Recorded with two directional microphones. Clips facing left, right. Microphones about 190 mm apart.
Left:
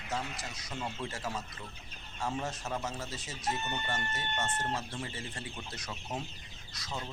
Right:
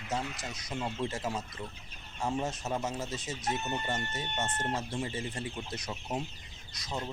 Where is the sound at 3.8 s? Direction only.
20° right (ahead or behind).